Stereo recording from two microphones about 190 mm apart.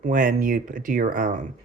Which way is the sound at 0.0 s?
45° right (ahead or behind).